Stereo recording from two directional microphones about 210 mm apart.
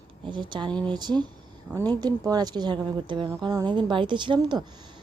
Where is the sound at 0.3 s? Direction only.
20° right (ahead or behind).